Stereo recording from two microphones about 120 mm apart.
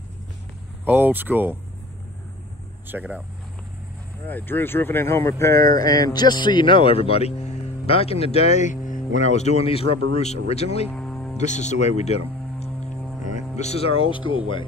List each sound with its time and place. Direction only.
0.8 s speech: 15° right (ahead or behind)
2.9 s speech: 15° right (ahead or behind)
4.3 s speech: 15° left (ahead or behind); by 10.9 s 60° left (ahead or behind)
10.9 s music: 5° left (ahead or behind)
11.3 s speech: 75° left (ahead or behind); by 14.7 s 45° left (ahead or behind)